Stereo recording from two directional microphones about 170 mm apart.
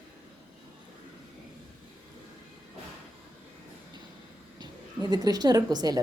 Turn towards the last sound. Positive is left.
turn(degrees=-20)  # may be behind; listen again after turning